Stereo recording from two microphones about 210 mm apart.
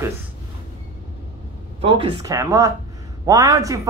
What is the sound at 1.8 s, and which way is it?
Speech, 20° right (ahead or behind).